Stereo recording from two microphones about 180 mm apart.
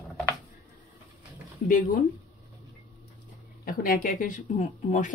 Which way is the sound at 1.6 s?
45° left (ahead or behind).